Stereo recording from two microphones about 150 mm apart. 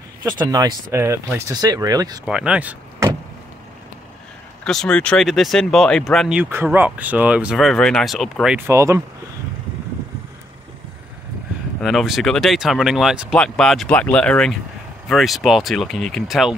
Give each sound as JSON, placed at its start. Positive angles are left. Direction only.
{"t": 0.2, "sound": "speech", "side_deg": -25}
{"t": 2.2, "sound": "speech", "side_deg": -5}
{"t": 4.6, "sound": "speech", "side_deg": 5}
{"t": 6.5, "sound": "speech", "side_deg": -15}
{"t": 7.5, "sound": "speech", "side_deg": 5}
{"t": 8.5, "sound": "speech", "side_deg": -20}
{"t": 11.8, "sound": "speech", "side_deg": 0}